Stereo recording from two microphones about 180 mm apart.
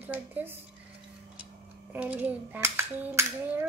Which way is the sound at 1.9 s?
10° right (ahead or behind).